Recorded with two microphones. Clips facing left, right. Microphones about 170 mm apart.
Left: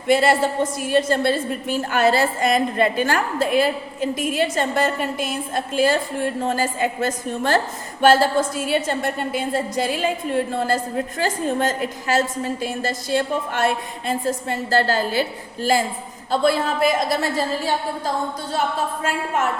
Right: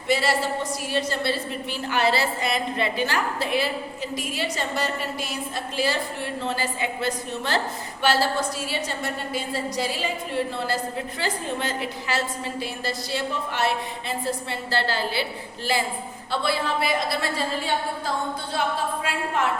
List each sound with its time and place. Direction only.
0.1 s a woman's voice: 50° left (ahead or behind)